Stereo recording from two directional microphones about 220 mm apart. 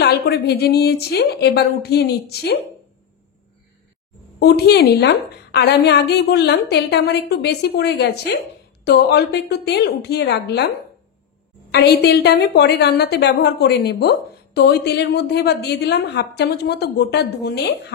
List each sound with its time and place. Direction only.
0.0 s a woman's voice: 45° left (ahead or behind)
4.4 s a woman's voice: 50° left (ahead or behind)
11.7 s a woman's voice: 50° left (ahead or behind)